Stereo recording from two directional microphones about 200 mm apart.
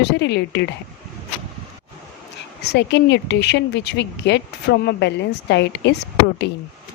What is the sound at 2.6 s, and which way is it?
Speech, 55° left (ahead or behind).